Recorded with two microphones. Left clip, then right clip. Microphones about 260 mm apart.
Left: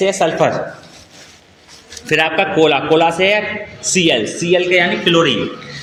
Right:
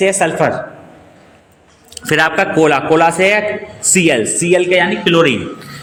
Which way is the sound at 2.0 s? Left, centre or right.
Right.